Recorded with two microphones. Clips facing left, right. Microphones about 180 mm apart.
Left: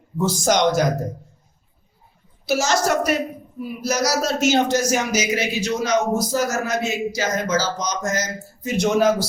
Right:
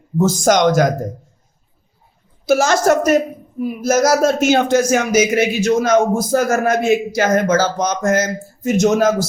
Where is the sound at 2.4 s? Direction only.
55° right (ahead or behind).